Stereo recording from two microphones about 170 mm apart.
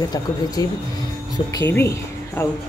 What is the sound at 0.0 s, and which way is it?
Speech, 20° left (ahead or behind).